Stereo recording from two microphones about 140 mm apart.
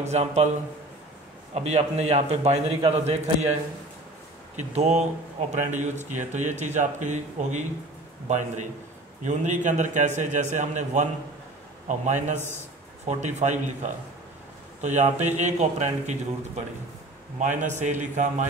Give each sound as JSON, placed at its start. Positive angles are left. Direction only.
{"t": 0.0, "sound": "a man's voice", "side_deg": -55}
{"t": 1.5, "sound": "a man's voice", "side_deg": -50}
{"t": 4.6, "sound": "a man's voice", "side_deg": -55}
{"t": 9.2, "sound": "a man's voice", "side_deg": -60}
{"t": 12.4, "sound": "a man's voice", "side_deg": 15}
{"t": 13.0, "sound": "a man's voice", "side_deg": -55}
{"t": 14.8, "sound": "a man's voice", "side_deg": -55}